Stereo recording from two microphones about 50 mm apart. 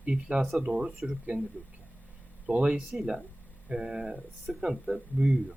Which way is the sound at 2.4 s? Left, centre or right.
Right.